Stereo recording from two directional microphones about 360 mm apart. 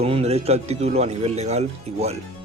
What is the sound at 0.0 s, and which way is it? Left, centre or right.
Speech, centre.